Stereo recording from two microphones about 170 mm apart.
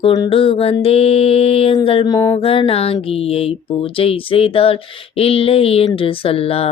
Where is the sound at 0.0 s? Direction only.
30° left (ahead or behind).